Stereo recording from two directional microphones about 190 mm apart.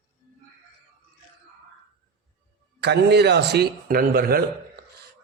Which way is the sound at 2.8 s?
60° right (ahead or behind).